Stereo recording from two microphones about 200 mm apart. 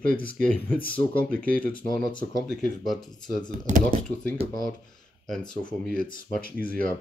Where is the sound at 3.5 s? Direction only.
40° right (ahead or behind).